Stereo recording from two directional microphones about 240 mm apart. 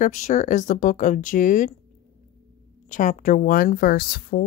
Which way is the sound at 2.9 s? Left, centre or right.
Left.